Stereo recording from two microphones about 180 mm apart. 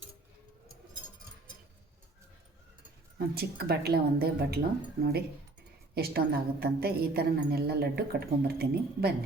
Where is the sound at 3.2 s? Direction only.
60° right (ahead or behind).